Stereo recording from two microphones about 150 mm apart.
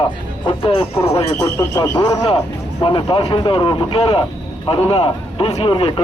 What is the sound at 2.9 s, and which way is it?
A man's voice, 35° left (ahead or behind).